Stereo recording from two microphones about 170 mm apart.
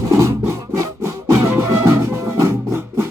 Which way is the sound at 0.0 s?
15° right (ahead or behind).